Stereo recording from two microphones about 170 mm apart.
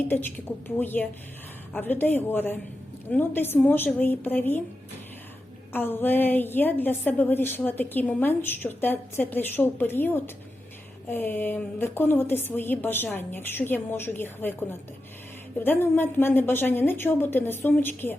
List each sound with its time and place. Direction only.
0.1 s a woman's voice: 10° left (ahead or behind)
5.7 s a woman's voice: 10° left (ahead or behind)